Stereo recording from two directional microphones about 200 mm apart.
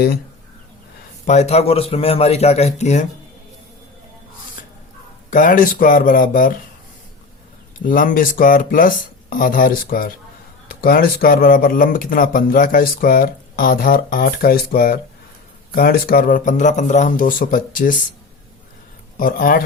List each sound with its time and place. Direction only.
1.3 s speech: 35° left (ahead or behind)
5.3 s speech: 40° left (ahead or behind)
7.9 s speech: 40° left (ahead or behind)
19.1 s speech: 45° left (ahead or behind)